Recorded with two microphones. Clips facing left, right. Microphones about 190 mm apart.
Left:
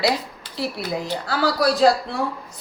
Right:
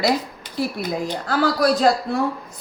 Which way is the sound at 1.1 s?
50° right (ahead or behind).